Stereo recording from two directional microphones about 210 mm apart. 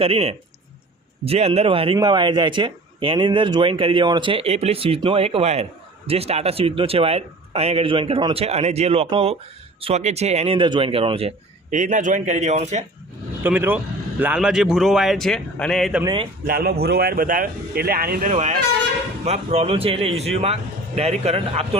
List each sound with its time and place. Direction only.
0.0 s a man's voice: 30° right (ahead or behind)
13.4 s speech: 10° right (ahead or behind)
16.5 s a man's voice: 45° right (ahead or behind); by 21.8 s 30° right (ahead or behind)